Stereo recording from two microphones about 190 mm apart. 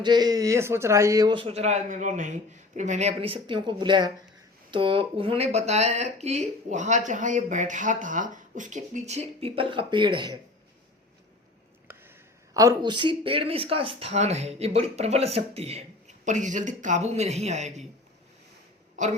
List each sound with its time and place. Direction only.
0.0 s speech: 20° right (ahead or behind)
11.9 s a sound: 10° right (ahead or behind)
12.5 s speech: 20° right (ahead or behind); by 17.8 s 35° right (ahead or behind)
19.0 s a woman's voice: 40° right (ahead or behind)